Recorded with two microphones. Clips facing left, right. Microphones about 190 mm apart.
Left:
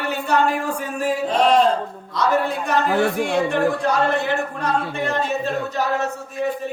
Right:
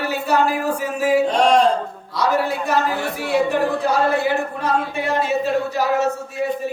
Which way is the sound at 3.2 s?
5° right (ahead or behind).